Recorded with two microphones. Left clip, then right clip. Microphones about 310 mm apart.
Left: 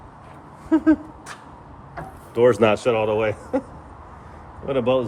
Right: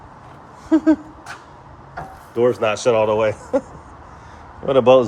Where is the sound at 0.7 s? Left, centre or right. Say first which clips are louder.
Right 3 dB; centre.